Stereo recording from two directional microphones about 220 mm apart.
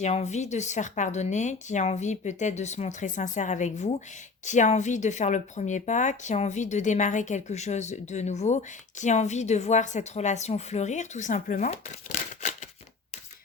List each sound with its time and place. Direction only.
0.0 s speech: 30° left (ahead or behind)